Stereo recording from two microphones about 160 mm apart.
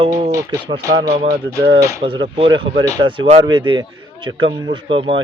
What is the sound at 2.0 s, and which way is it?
Speech, 35° right (ahead or behind).